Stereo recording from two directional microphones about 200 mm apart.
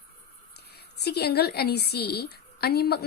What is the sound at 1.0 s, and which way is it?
A woman's voice, 55° left (ahead or behind).